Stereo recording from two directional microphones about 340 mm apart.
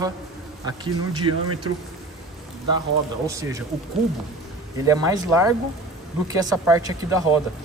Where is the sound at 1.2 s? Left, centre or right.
Right.